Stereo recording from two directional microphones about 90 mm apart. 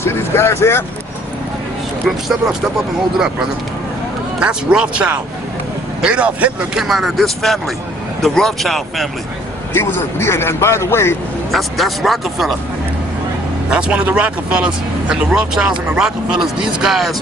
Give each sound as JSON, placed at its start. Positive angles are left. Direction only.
{"t": 0.0, "sound": "speech", "side_deg": 30}
{"t": 2.0, "sound": "speech", "side_deg": 0}
{"t": 4.4, "sound": "speech", "side_deg": -10}
{"t": 6.8, "sound": "speech", "side_deg": 0}
{"t": 9.7, "sound": "a man's voice", "side_deg": 30}
{"t": 11.5, "sound": "speech", "side_deg": 0}
{"t": 13.7, "sound": "speech", "side_deg": -10}